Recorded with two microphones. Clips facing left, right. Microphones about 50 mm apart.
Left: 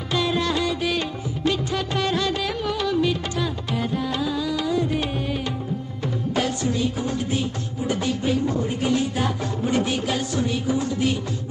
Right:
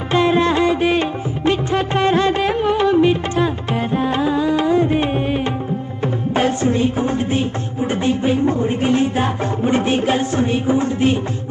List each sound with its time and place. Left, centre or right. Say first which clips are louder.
0.1 s music: right 8 dB; right